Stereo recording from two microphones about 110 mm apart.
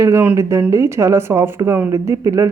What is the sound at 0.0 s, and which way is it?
Speech, 25° right (ahead or behind).